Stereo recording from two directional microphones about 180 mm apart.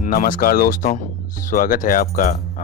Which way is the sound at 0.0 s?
50° left (ahead or behind).